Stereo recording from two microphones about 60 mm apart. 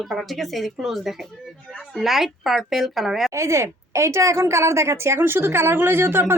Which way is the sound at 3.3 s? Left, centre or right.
Right.